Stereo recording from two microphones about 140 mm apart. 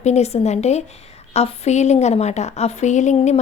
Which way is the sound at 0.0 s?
50° left (ahead or behind).